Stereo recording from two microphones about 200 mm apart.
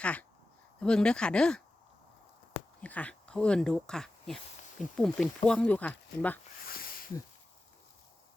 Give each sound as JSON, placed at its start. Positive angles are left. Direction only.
{"t": 0.0, "sound": "speech", "side_deg": 5}
{"t": 2.8, "sound": "speech", "side_deg": 5}
{"t": 6.7, "sound": "a sound", "side_deg": 45}